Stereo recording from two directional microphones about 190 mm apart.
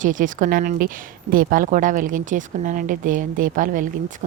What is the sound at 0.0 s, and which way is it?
A woman's voice, 45° right (ahead or behind).